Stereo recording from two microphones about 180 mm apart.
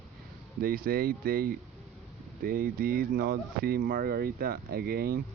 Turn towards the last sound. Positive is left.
turn(degrees=-60)  # may be behind; listen again after turning